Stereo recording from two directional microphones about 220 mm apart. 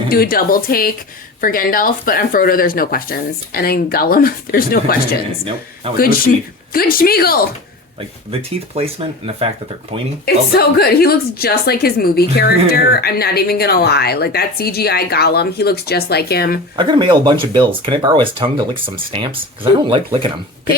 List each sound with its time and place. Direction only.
0.1 s a woman's voice: 45° left (ahead or behind)
8.3 s speech: 25° right (ahead or behind)
10.2 s a woman's voice: 45° left (ahead or behind)
16.7 s speech: 20° right (ahead or behind)